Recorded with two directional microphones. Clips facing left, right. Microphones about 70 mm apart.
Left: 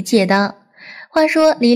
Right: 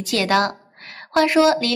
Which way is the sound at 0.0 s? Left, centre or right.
Left.